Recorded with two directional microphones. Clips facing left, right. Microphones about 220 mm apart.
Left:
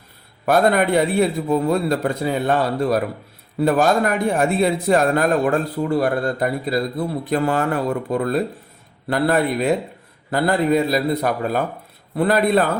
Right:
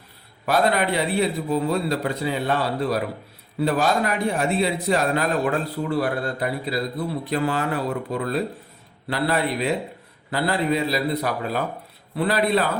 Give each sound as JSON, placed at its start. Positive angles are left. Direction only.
{"t": 0.4, "sound": "a man's voice", "side_deg": 50}